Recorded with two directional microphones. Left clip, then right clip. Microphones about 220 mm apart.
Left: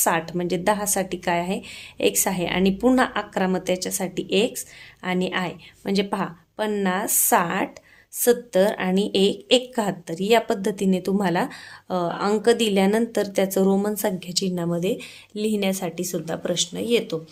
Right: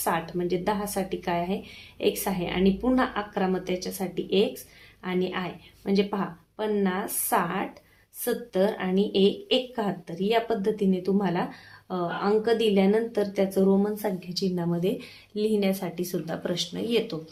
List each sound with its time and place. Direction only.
0.0 s a woman's voice: 50° left (ahead or behind); by 17.2 s 30° left (ahead or behind)